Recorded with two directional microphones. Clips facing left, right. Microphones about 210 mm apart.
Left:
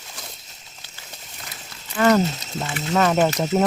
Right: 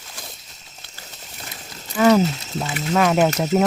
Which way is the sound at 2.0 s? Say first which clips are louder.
Right 2 dB; 5° right (ahead or behind).